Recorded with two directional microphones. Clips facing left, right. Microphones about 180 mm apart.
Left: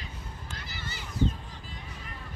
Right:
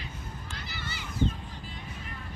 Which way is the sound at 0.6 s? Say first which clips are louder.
Right 2 dB; 45° left (ahead or behind).